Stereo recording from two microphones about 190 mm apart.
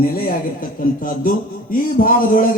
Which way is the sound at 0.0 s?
50° left (ahead or behind).